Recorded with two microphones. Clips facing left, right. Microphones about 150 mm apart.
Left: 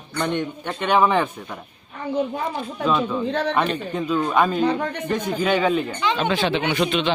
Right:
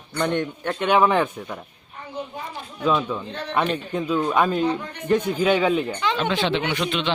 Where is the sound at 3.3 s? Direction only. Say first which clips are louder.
Left 9 dB; 90° left.